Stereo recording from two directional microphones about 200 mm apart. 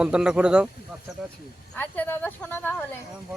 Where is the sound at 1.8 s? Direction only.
10° left (ahead or behind).